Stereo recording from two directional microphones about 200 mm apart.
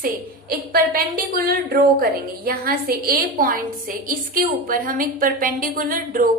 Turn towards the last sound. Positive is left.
turn(degrees=-45)  # may be behind; listen again after turning